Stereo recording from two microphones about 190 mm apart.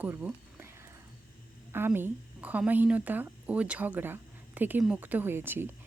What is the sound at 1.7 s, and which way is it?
A woman's voice, 10° right (ahead or behind).